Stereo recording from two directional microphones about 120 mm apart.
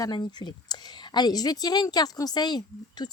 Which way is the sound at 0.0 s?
35° left (ahead or behind).